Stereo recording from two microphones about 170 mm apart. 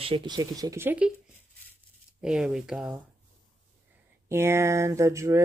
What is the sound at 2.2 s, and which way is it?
Speech, 5° right (ahead or behind).